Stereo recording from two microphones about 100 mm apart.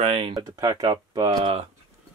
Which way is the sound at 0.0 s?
90° right.